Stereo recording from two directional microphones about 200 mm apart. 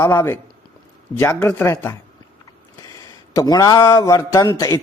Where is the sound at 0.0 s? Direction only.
10° left (ahead or behind).